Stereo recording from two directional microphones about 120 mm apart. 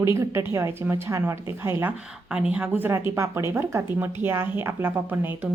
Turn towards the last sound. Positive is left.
turn(degrees=-15)  # may be behind; listen again after turning